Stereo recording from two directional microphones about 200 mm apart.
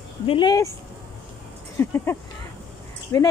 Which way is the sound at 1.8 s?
10° left (ahead or behind).